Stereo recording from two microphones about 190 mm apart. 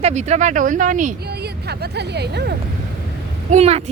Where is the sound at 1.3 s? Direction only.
60° right (ahead or behind).